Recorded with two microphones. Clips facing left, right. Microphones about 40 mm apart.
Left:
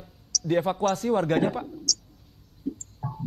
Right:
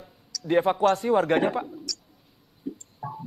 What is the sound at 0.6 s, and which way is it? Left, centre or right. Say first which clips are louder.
A man's voice: right 5 dB; centre.